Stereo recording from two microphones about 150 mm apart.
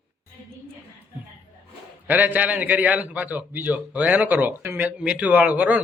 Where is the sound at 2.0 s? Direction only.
10° right (ahead or behind).